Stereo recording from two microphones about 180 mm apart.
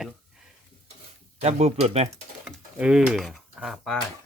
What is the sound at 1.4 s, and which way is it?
Speech, 35° right (ahead or behind).